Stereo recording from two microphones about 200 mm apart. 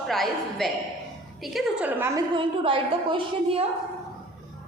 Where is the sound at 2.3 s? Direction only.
25° right (ahead or behind).